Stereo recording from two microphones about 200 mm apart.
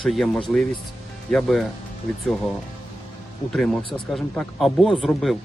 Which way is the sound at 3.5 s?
Centre (ahead or behind).